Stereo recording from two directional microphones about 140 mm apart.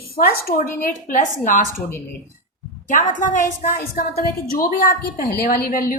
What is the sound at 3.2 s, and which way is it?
Speech, 65° left (ahead or behind).